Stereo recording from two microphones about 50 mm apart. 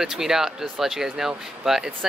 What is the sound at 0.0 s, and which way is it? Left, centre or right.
Speech, centre.